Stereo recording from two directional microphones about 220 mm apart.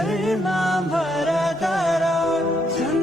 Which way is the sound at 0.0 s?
Centre (ahead or behind).